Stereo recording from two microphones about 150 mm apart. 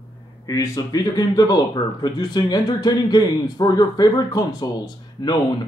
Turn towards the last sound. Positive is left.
turn(degrees=30)  # may be behind; listen again after turning